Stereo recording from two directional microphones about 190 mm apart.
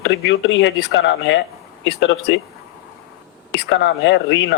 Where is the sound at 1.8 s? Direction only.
85° left.